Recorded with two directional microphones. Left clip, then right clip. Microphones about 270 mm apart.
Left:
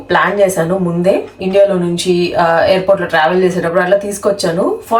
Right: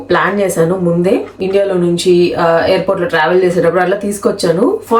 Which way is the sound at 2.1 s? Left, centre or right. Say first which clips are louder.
Left 1 dB; centre.